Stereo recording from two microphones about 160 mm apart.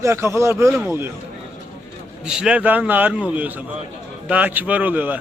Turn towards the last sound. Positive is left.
turn(degrees=-10)  # may be behind; listen again after turning